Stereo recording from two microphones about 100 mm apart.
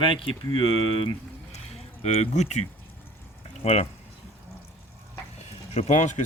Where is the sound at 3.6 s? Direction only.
90° left.